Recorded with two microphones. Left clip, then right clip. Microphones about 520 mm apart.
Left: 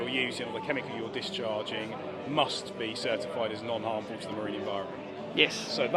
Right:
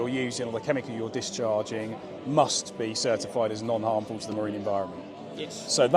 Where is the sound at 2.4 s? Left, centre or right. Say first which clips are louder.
Right 5 dB; right.